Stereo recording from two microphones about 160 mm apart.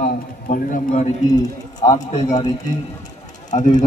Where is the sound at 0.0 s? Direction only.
55° left (ahead or behind).